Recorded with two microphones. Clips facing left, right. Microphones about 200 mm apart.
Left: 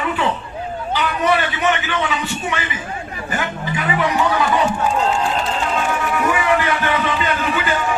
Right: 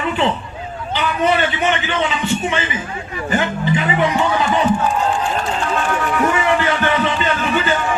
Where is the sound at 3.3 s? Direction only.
25° right (ahead or behind).